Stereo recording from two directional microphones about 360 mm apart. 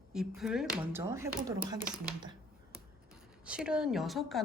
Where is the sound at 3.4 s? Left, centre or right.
Centre.